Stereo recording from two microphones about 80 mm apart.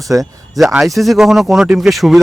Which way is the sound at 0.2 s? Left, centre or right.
Centre.